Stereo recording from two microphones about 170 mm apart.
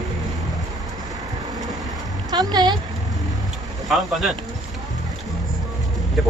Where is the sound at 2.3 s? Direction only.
25° right (ahead or behind).